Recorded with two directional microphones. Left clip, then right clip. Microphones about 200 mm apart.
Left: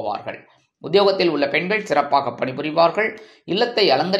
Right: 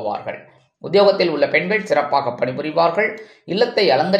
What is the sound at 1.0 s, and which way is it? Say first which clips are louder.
A man's voice: right 4 dB; 25° left (ahead or behind).